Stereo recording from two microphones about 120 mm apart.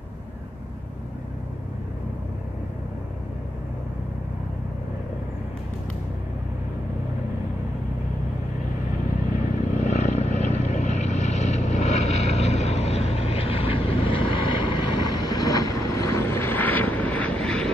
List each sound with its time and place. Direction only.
9.8 s vehicle: 70° left (ahead or behind); by 17.6 s 10° left (ahead or behind)